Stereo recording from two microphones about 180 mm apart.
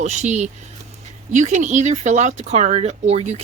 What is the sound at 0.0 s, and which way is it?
Speech, 40° right (ahead or behind).